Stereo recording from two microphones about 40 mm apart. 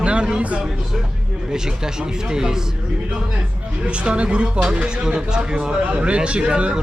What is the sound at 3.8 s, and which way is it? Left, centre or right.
Speech, right.